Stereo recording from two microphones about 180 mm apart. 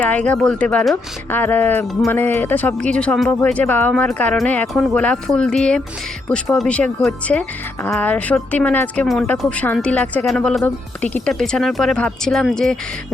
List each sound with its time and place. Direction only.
0.0 s speech: 10° left (ahead or behind)